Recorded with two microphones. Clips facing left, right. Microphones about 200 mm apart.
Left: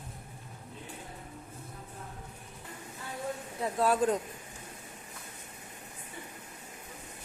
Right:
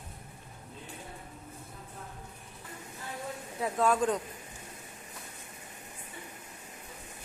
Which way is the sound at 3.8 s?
35° left (ahead or behind).